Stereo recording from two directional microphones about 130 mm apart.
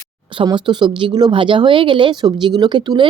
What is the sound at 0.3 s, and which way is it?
Speech, 35° right (ahead or behind).